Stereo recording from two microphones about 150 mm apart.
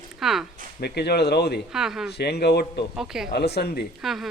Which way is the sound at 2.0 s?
90° left.